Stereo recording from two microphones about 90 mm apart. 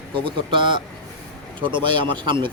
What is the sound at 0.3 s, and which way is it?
Speech, 70° right (ahead or behind).